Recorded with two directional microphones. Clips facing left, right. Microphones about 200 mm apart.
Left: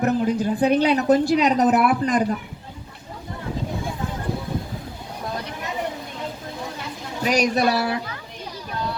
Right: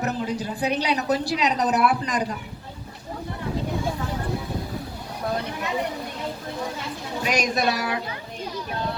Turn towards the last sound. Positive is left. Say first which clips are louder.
# left 3 dB
turn(degrees=35)  # may be behind; listen again after turning